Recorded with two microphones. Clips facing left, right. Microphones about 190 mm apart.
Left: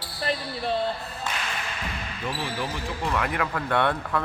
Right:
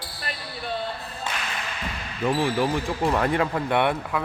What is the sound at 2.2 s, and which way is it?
Speech, 50° right (ahead or behind).